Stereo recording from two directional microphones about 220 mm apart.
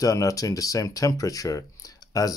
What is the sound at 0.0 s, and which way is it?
Speech, 15° left (ahead or behind).